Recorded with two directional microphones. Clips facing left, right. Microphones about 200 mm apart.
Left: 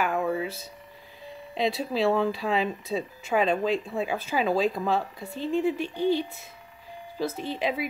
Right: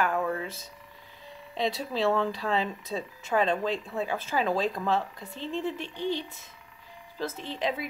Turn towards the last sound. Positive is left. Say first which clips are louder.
# left 3 dB
turn(degrees=10)  # may be behind; listen again after turning